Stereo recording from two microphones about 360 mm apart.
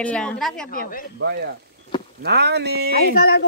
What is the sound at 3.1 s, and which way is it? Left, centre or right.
Speech, left.